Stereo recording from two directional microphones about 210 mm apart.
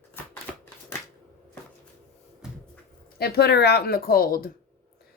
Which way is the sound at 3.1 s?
50° left (ahead or behind).